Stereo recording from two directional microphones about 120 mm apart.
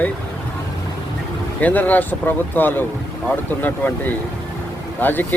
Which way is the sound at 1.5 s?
15° left (ahead or behind).